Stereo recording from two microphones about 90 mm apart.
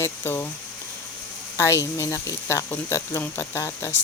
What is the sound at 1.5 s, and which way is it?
Speech, 30° left (ahead or behind).